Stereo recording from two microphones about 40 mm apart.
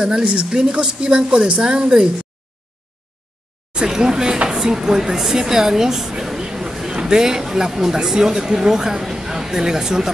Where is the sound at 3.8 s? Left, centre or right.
Centre.